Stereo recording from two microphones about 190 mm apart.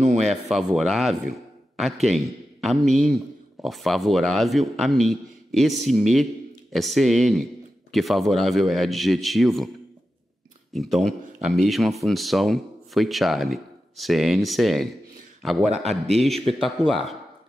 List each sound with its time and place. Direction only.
0.0 s speech: 35° right (ahead or behind)
0.5 s speech: centre (ahead or behind)
10.7 s speech: centre (ahead or behind)
16.2 s speech: centre (ahead or behind)